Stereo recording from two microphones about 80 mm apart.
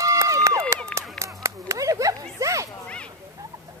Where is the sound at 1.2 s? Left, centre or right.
Right.